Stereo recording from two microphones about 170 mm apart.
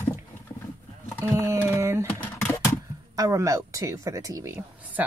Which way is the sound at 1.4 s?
15° right (ahead or behind).